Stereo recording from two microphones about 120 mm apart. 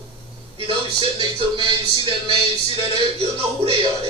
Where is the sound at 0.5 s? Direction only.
45° right (ahead or behind).